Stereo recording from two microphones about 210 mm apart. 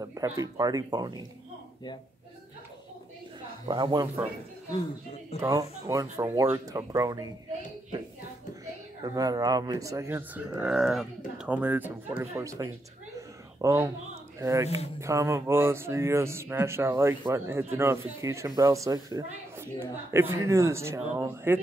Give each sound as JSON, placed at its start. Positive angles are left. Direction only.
{"t": 0.0, "sound": "speech", "side_deg": -15}
{"t": 3.6, "sound": "speech", "side_deg": -20}
{"t": 5.4, "sound": "speech", "side_deg": -15}
{"t": 9.0, "sound": "speech", "side_deg": -15}